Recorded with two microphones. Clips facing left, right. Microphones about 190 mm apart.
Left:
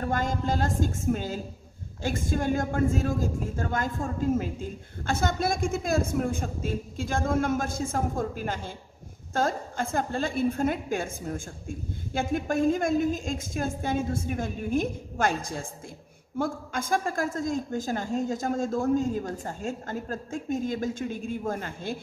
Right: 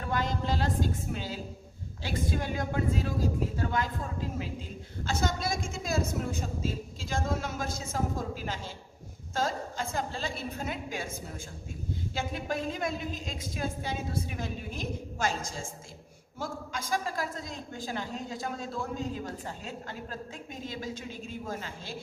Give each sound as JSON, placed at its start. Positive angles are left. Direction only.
{"t": 0.0, "sound": "speech", "side_deg": 45}